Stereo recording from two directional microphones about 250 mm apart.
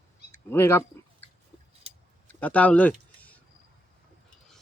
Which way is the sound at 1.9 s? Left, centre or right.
Right.